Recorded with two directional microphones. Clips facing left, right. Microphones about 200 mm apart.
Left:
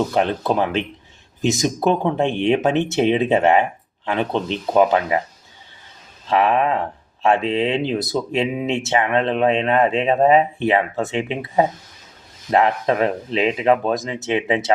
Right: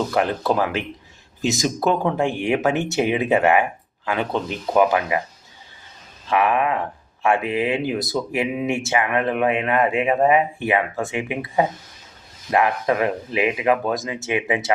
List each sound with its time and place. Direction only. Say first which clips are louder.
0.1 s speech: left 1 dB; 20° left (ahead or behind)
6.2 s speech: left 2 dB; 25° left (ahead or behind)